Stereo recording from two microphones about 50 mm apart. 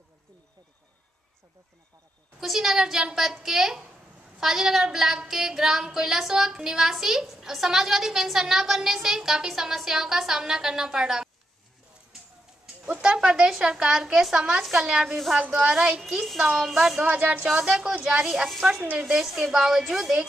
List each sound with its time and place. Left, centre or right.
2.4 s a woman's voice: centre
13.0 s a woman's voice: centre
15.0 s a woman's voice: centre
15.6 s a woman's voice: centre
16.0 s a woman's voice: centre
17.0 s a woman's voice: right
17.5 s a woman's voice: centre